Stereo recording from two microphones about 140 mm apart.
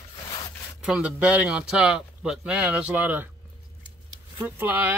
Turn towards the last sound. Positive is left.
turn(degrees=-15)  # may be behind; listen again after turning